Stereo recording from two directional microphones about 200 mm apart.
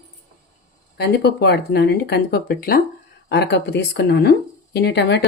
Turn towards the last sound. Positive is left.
turn(degrees=55)  # may be behind; listen again after turning